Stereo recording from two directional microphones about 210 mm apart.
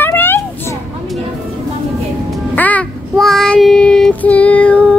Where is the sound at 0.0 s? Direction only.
10° left (ahead or behind).